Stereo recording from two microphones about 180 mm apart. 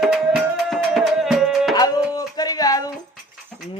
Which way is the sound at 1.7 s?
20° left (ahead or behind).